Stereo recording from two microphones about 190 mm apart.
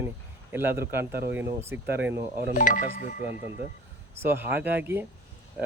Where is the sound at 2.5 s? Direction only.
45° left (ahead or behind).